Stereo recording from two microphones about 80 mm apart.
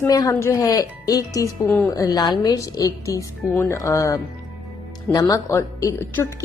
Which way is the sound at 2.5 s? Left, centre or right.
Left.